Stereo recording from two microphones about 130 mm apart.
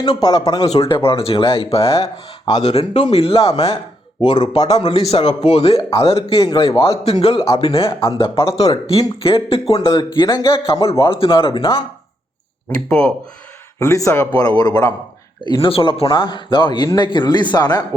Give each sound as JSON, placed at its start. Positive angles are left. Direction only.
{"t": 0.0, "sound": "a man's voice", "side_deg": 30}
{"t": 0.7, "sound": "a man's voice", "side_deg": 45}
{"t": 2.6, "sound": "a man's voice", "side_deg": 60}
{"t": 8.5, "sound": "a man's voice", "side_deg": 30}
{"t": 8.9, "sound": "a man's voice", "side_deg": 45}
{"t": 10.3, "sound": "a man's voice", "side_deg": 25}
{"t": 11.0, "sound": "a man's voice", "side_deg": 45}
{"t": 12.7, "sound": "speech", "side_deg": 5}
{"t": 13.7, "sound": "a man's voice", "side_deg": 25}
{"t": 15.6, "sound": "a man's voice", "side_deg": 45}